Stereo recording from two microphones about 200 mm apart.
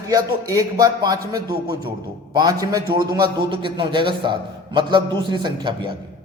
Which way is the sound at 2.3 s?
20° right (ahead or behind).